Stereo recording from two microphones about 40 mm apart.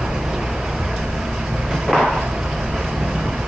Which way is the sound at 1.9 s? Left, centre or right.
Centre.